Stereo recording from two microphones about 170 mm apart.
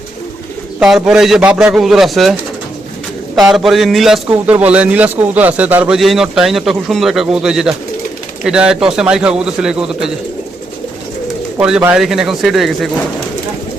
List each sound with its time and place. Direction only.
0.8 s a man's voice: 5° right (ahead or behind)
3.3 s a man's voice: centre (ahead or behind)
11.9 s a man's voice: centre (ahead or behind)